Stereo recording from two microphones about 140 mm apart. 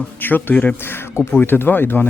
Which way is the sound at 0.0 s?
15° left (ahead or behind).